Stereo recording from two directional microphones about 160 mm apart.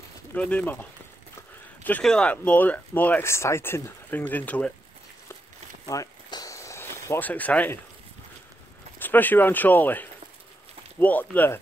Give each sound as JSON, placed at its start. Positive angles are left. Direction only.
{"t": 0.3, "sound": "speech", "side_deg": 10}
{"t": 1.8, "sound": "speech", "side_deg": 10}
{"t": 5.9, "sound": "a sound", "side_deg": 20}
{"t": 9.0, "sound": "speech", "side_deg": 10}